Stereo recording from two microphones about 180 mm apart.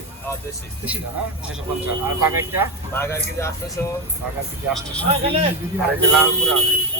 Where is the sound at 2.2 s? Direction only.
15° right (ahead or behind).